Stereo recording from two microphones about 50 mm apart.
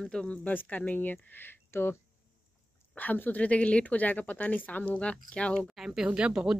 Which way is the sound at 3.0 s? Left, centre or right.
Left.